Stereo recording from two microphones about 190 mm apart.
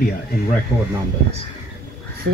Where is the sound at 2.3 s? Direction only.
70° right (ahead or behind).